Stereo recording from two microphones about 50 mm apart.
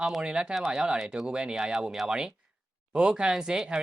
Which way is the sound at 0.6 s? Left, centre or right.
Centre.